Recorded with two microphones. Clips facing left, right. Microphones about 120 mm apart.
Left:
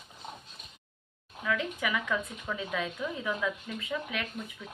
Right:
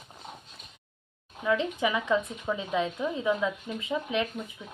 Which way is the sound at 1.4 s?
25° right (ahead or behind).